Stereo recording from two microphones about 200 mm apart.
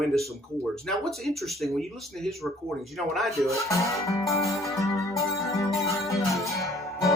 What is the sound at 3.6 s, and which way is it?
Music, 15° left (ahead or behind).